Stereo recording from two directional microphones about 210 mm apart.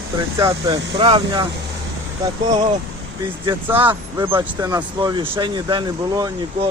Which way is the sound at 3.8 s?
20° right (ahead or behind).